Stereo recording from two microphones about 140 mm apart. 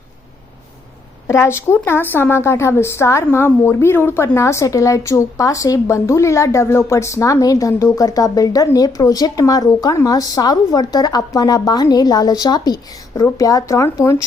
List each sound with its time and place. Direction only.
1.3 s a woman's voice: 20° left (ahead or behind)